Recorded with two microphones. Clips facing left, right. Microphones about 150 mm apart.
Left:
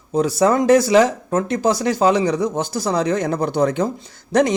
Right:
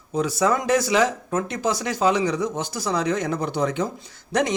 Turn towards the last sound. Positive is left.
turn(degrees=35)  # may be behind; listen again after turning